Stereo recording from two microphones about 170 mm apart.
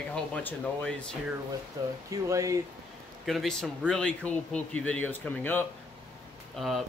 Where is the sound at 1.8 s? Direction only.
20° right (ahead or behind).